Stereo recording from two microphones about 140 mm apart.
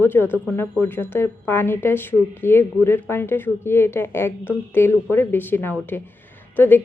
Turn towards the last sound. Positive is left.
turn(degrees=15)  # may be behind; listen again after turning